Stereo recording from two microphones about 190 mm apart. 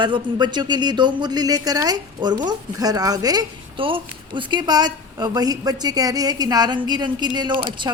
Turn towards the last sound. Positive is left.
turn(degrees=-25)  # may be behind; listen again after turning